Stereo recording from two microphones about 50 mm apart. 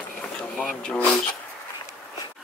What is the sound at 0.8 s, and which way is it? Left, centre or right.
Speech, left.